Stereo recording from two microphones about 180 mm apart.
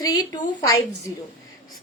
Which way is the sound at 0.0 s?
20° left (ahead or behind).